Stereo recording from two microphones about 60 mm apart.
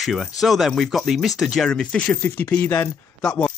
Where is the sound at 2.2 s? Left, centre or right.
Left.